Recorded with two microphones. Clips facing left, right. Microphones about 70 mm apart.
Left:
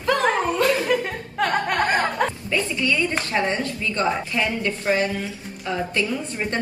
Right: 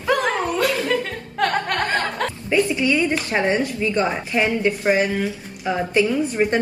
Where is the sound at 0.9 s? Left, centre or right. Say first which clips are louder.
Even; centre.